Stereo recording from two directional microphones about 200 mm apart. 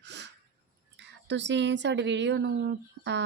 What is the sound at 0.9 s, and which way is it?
Speech, 60° right (ahead or behind).